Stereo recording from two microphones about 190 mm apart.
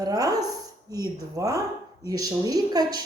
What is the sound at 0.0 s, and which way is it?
A woman's voice, 20° right (ahead or behind).